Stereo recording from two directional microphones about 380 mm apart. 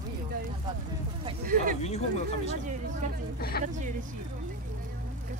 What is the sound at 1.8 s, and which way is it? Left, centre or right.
Speech, centre.